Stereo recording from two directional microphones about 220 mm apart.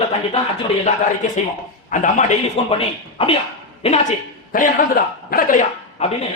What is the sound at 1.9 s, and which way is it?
Speech, 35° left (ahead or behind).